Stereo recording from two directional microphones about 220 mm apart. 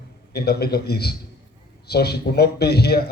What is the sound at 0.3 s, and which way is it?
A man's voice, 45° left (ahead or behind).